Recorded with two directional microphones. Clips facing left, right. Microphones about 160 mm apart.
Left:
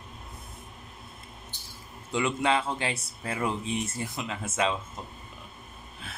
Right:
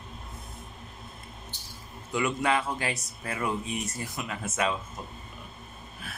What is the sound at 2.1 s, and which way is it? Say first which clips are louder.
Speech: left 1 dB; 25° left (ahead or behind).